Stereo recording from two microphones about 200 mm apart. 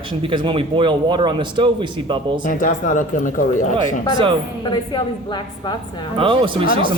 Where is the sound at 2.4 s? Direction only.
40° left (ahead or behind).